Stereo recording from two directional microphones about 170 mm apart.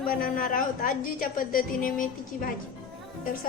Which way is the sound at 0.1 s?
55° left (ahead or behind).